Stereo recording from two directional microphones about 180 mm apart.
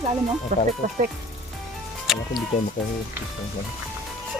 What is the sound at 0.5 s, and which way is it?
Speech, 45° right (ahead or behind).